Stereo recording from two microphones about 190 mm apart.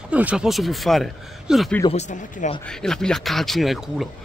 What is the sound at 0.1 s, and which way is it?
Speech, 5° right (ahead or behind).